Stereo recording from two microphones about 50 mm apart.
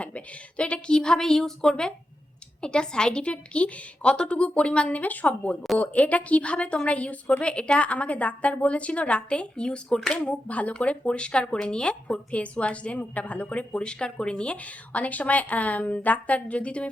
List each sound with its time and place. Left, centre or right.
0.0 s a woman's voice: left
10.2 s speech: left